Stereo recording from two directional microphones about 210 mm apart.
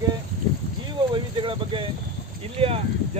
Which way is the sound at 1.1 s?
25° right (ahead or behind).